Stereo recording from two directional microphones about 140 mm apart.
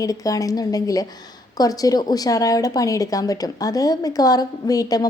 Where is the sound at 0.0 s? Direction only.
25° left (ahead or behind).